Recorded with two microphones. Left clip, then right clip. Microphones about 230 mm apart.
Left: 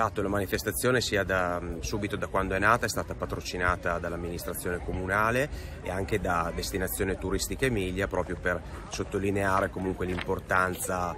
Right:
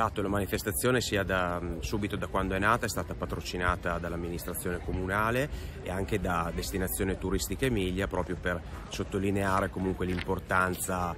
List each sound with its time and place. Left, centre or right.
0.0 s speech: centre